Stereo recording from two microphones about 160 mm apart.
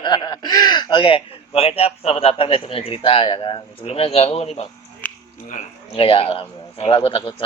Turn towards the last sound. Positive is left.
turn(degrees=35)  # may be behind; listen again after turning